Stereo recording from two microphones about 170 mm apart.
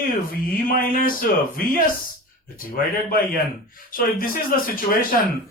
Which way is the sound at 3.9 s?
55° left (ahead or behind).